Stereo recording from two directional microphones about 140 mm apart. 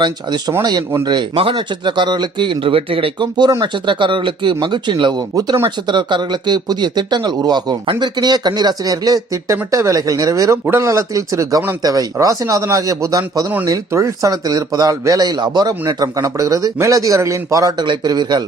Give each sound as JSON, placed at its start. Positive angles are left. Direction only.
{"t": 0.0, "sound": "speech", "side_deg": -30}
{"t": 5.9, "sound": "speech", "side_deg": -35}